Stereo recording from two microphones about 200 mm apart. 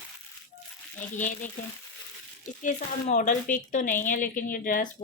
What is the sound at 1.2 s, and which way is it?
Speech, 40° left (ahead or behind).